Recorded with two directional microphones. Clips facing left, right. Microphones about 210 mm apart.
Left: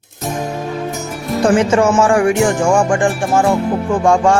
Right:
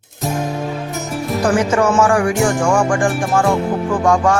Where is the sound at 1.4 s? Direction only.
25° left (ahead or behind).